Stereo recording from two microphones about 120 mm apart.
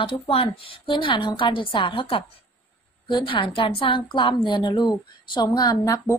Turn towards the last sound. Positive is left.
turn(degrees=30)  # may be behind; listen again after turning